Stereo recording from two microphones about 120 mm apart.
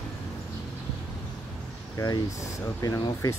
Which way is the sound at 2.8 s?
30° left (ahead or behind).